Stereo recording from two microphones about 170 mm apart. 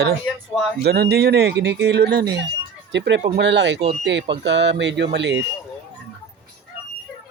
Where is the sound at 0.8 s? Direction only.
70° right (ahead or behind); by 5.4 s 90° right.